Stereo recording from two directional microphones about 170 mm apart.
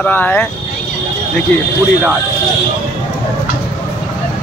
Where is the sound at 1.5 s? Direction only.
5° left (ahead or behind).